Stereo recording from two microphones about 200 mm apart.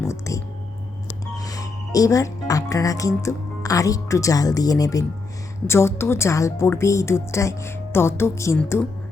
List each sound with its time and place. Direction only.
0.0 s whispering: 15° left (ahead or behind)
1.0 s a woman's voice: 15° left (ahead or behind)